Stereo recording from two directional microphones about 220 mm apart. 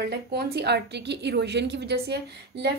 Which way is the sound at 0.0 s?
45° right (ahead or behind).